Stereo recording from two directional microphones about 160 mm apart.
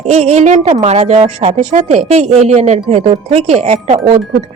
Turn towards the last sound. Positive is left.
turn(degrees=-40)  # may be behind; listen again after turning